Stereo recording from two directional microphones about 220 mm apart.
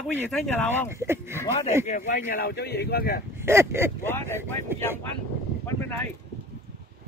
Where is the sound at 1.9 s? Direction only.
35° left (ahead or behind).